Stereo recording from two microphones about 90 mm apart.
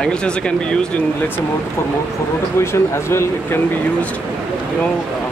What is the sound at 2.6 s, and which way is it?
Speech, 30° left (ahead or behind).